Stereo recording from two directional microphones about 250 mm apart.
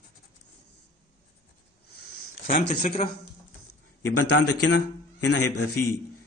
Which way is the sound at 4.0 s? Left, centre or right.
Left.